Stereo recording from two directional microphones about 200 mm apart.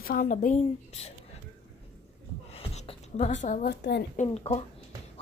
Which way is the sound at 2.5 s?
30° left (ahead or behind).